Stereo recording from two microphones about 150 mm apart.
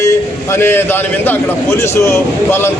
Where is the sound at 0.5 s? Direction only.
15° left (ahead or behind).